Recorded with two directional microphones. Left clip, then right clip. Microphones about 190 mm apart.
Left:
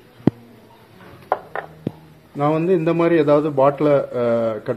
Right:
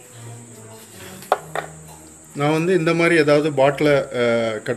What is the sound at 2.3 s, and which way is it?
A man's voice, 35° left (ahead or behind).